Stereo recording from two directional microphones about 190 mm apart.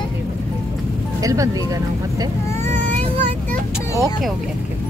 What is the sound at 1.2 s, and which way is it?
Speech, 15° right (ahead or behind).